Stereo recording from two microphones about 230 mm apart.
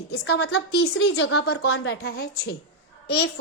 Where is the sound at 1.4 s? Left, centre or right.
Left.